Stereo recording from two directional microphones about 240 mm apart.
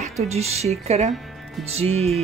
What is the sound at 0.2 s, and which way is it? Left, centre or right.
Speech, right.